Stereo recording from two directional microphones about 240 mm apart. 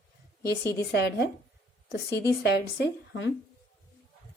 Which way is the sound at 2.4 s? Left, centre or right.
Left.